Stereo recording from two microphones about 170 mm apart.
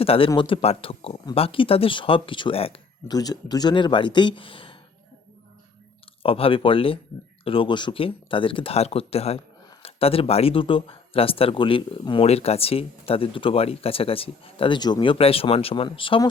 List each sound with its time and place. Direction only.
0.0 s speech: 35° left (ahead or behind)
3.1 s speech: 20° left (ahead or behind)
6.2 s speech: 35° left (ahead or behind)